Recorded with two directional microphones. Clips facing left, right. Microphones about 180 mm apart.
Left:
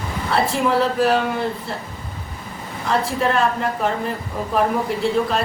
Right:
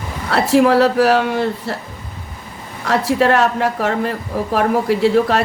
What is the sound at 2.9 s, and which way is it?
A woman's voice, 75° right (ahead or behind).